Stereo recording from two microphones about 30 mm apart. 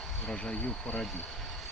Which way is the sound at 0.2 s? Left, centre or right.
Left.